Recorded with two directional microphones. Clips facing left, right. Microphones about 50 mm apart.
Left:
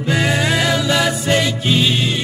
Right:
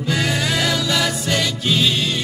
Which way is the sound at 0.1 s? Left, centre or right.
Centre.